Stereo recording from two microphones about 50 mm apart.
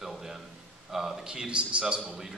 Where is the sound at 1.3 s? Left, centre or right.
Centre.